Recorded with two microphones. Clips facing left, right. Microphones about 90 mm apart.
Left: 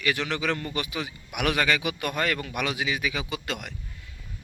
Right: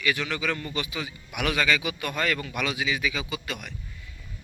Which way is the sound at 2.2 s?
30° left (ahead or behind).